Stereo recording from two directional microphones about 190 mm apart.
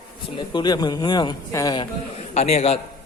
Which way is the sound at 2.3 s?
35° left (ahead or behind).